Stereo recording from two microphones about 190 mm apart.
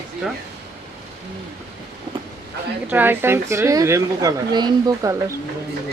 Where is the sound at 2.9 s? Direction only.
10° right (ahead or behind).